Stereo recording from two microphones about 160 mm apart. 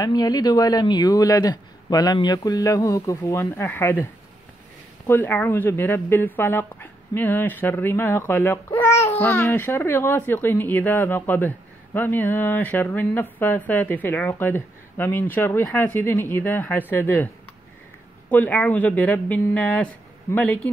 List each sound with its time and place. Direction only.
0.0 s speech: 25° left (ahead or behind)
18.3 s speech: 10° left (ahead or behind)